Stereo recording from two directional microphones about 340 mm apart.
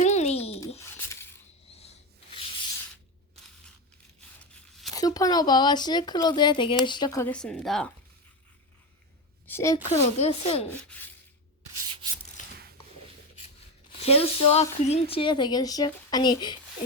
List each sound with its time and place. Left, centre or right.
0.0 s a sound: centre
1.7 s rub: centre
4.5 s speech: centre
9.5 s a woman's voice: centre
9.8 s speech: centre
10.7 s rub: centre
13.9 s speech: centre